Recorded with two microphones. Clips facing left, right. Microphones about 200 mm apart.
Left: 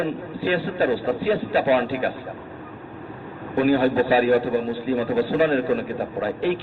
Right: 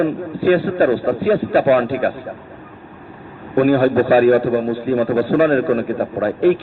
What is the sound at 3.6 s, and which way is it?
A man's voice, 50° right (ahead or behind).